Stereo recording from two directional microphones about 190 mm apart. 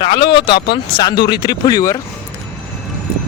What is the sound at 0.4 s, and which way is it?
Speech, 25° left (ahead or behind).